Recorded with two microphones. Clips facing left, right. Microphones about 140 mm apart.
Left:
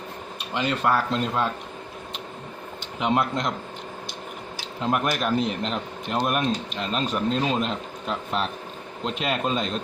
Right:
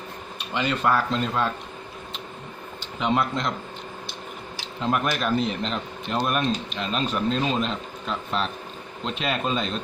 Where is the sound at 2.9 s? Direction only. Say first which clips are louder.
Even; 5° left (ahead or behind).